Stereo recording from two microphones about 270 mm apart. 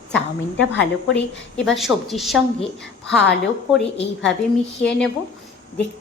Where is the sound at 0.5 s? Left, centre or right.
Left.